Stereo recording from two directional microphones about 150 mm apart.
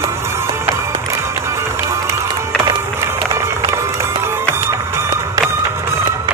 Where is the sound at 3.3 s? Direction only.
20° right (ahead or behind).